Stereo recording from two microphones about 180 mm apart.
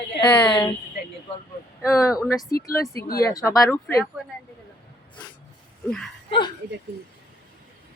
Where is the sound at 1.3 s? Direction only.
30° left (ahead or behind).